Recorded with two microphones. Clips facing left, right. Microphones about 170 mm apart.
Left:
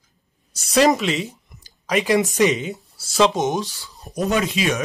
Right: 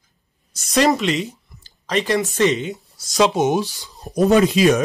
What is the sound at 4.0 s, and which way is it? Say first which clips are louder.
Speech: right 7 dB; 35° right (ahead or behind).